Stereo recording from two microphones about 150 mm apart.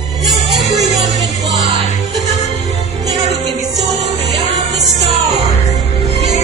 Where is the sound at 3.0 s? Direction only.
25° right (ahead or behind).